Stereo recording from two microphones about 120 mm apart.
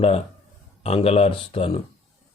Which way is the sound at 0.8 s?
55° left (ahead or behind).